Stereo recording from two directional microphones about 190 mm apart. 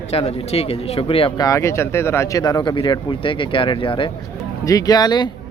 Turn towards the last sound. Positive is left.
turn(degrees=20)  # may be behind; listen again after turning